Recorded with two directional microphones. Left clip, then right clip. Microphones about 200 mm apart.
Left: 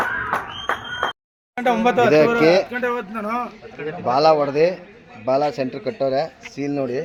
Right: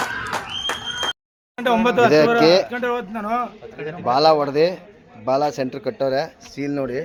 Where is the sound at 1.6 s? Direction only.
60° right (ahead or behind).